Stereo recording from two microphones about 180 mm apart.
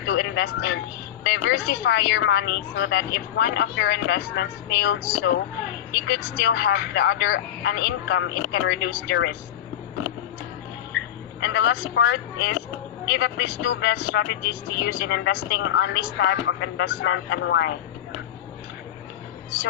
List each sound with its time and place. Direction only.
0.0 s a woman's voice: 90° left
11.3 s a woman's voice: 80° left